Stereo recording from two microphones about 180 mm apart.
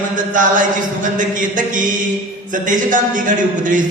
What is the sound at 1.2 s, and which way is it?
A man's voice, 45° right (ahead or behind).